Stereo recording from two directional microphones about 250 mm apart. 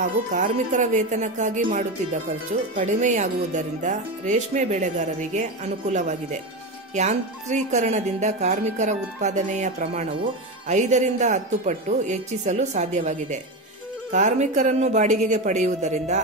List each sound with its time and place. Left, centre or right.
0.0 s speech: right